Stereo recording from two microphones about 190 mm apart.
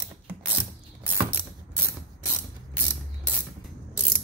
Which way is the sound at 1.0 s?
10° right (ahead or behind).